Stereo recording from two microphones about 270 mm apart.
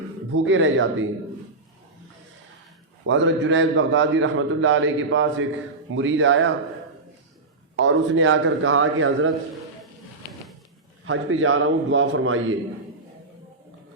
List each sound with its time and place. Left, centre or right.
0.3 s a man's voice: right
3.1 s a man's voice: right
7.8 s a man's voice: right
11.0 s a man's voice: right